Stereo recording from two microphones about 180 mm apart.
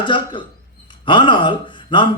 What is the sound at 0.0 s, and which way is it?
Speech, 25° left (ahead or behind).